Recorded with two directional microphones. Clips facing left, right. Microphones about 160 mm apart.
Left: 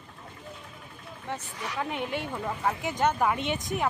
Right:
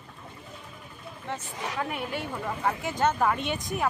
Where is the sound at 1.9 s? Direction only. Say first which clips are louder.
Left 1 dB; 20° left (ahead or behind).